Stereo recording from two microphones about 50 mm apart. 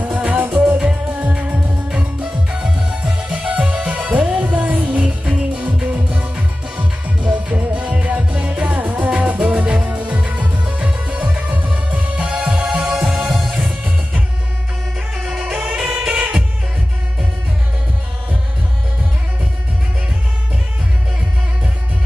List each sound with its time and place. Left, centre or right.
0.0 s music: right
3.2 s music: right
12.5 s music: centre
15.1 s music: centre
16.1 s music: right